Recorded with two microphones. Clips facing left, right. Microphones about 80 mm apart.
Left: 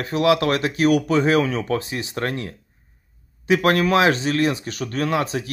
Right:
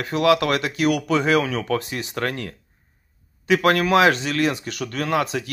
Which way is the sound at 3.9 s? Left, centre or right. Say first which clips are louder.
Right 1 dB; right.